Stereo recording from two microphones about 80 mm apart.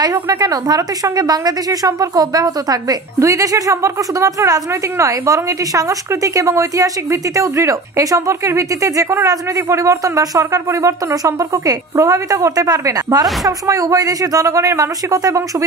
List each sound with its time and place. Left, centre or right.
0.0 s a woman's voice: right